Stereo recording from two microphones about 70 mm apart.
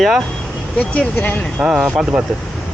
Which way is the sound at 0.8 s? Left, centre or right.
Left.